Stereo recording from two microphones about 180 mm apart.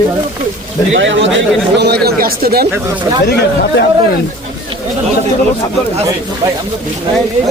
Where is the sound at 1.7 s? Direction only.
65° right (ahead or behind).